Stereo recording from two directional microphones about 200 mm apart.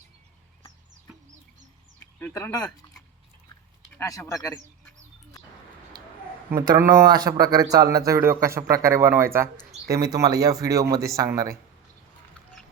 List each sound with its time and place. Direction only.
2.1 s speech: 10° left (ahead or behind)
3.9 s speech: 15° left (ahead or behind)
6.5 s a man's voice: 15° right (ahead or behind)